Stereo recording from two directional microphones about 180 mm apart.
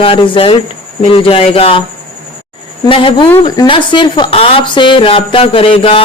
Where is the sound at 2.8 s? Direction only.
30° left (ahead or behind).